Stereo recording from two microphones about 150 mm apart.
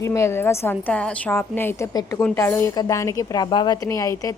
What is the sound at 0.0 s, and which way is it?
A woman's voice, 20° left (ahead or behind).